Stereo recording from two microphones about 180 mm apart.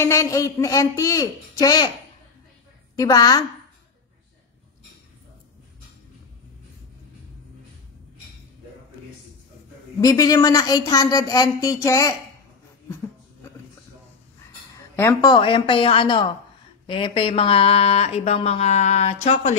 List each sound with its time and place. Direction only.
0.0 s speech: 15° left (ahead or behind)
3.0 s speech: 20° left (ahead or behind)
9.9 s speech: 20° left (ahead or behind)
15.0 s speech: 20° left (ahead or behind); by 19.5 s 35° left (ahead or behind)